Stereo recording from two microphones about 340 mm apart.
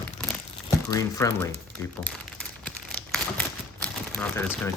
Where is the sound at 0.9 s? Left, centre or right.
Centre.